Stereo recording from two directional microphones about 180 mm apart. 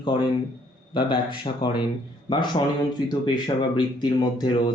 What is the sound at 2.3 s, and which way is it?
Speech, 25° left (ahead or behind).